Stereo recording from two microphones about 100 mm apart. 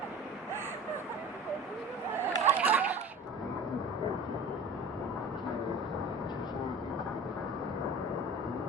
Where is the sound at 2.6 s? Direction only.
15° right (ahead or behind).